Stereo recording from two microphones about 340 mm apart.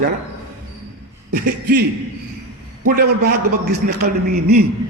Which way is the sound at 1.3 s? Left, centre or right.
Right.